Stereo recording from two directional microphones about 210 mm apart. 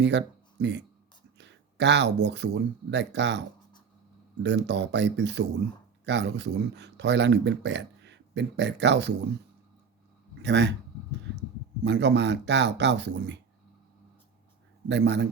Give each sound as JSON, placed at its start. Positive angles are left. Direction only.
{"t": 0.0, "sound": "speech", "side_deg": -55}
{"t": 4.4, "sound": "speech", "side_deg": -55}
{"t": 10.4, "sound": "speech", "side_deg": -55}
{"t": 11.8, "sound": "speech", "side_deg": -55}
{"t": 14.8, "sound": "speech", "side_deg": -55}